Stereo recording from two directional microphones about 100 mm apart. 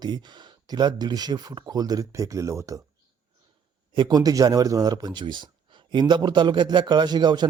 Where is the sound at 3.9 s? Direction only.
50° right (ahead or behind).